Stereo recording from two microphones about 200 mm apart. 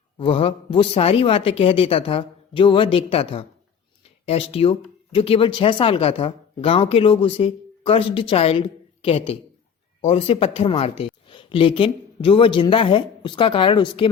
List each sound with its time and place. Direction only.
0.2 s speech: 25° left (ahead or behind)